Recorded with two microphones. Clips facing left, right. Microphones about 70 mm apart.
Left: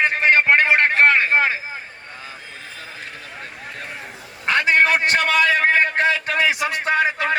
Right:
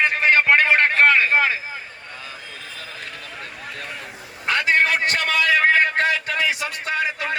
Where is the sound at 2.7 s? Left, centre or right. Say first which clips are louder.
Even; left.